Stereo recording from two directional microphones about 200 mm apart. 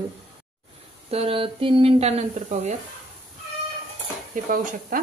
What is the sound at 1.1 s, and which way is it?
Speech, 30° right (ahead or behind).